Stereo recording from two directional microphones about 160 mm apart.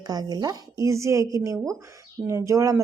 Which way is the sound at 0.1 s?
25° right (ahead or behind).